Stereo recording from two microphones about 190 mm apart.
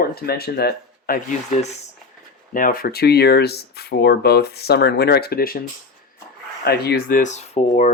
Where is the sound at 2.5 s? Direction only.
45° left (ahead or behind).